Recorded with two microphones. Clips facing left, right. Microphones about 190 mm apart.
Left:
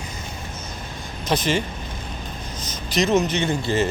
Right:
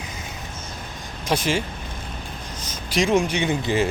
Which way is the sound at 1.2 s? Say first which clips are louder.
Left 1 dB; 10° right (ahead or behind).